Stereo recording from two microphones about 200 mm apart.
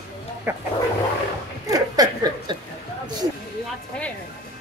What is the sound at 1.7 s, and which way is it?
Speech, 20° right (ahead or behind).